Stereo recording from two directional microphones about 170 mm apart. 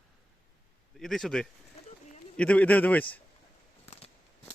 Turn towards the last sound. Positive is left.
turn(degrees=10)  # may be behind; listen again after turning